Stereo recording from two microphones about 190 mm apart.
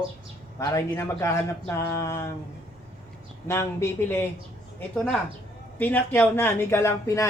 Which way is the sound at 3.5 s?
15° left (ahead or behind).